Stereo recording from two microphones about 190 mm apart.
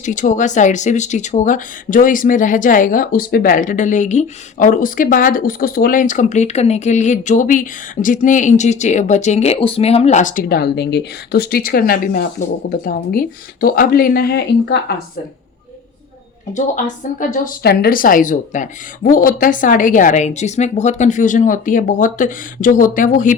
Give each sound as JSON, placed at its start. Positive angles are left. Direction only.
{"t": 0.0, "sound": "speech", "side_deg": 40}
{"t": 16.6, "sound": "speech", "side_deg": 40}